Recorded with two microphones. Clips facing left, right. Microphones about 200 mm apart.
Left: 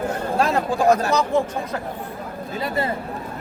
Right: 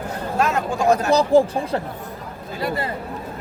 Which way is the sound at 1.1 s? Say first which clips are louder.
Right 5 dB; 35° right (ahead or behind).